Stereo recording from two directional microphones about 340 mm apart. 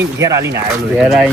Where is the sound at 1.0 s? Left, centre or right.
Centre.